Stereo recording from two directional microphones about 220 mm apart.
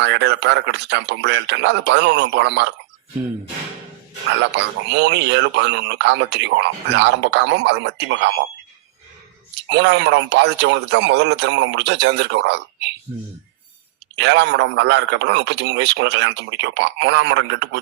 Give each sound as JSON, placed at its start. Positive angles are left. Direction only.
{"t": 0.0, "sound": "speech", "side_deg": -50}
{"t": 4.4, "sound": "speech", "side_deg": -50}
{"t": 9.6, "sound": "speech", "side_deg": -55}
{"t": 14.2, "sound": "speech", "side_deg": -50}